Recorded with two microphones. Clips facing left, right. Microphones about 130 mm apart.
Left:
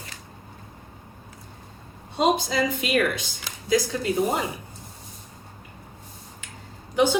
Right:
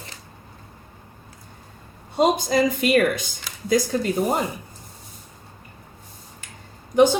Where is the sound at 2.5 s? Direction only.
45° right (ahead or behind).